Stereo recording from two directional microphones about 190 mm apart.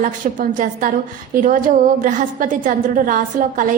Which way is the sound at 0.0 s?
45° right (ahead or behind).